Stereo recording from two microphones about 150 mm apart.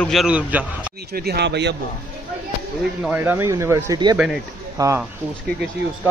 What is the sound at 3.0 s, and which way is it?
Speech, 10° right (ahead or behind).